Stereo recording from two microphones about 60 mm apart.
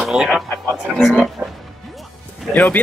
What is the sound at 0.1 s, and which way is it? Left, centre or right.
Speech, centre.